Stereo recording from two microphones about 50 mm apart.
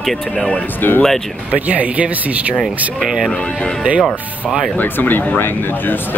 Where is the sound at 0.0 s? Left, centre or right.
Centre.